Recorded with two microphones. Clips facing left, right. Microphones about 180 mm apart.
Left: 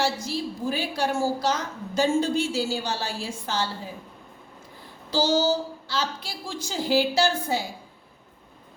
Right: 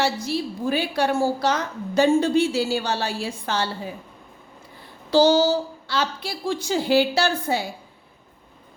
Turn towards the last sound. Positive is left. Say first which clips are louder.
# right 1 dB
turn(degrees=-65)  # may be behind; listen again after turning